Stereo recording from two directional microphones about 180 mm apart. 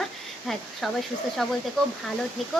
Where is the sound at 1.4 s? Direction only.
Centre (ahead or behind).